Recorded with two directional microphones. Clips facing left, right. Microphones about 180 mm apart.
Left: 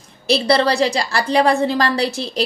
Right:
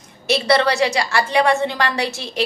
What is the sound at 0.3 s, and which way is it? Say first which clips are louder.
A woman's voice: left 1 dB; 35° left (ahead or behind).